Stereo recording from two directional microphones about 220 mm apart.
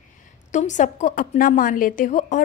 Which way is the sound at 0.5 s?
35° left (ahead or behind).